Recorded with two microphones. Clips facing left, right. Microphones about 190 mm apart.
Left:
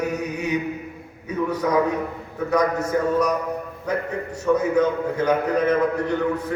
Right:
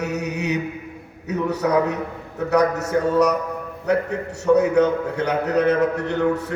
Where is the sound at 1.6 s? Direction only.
65° right (ahead or behind).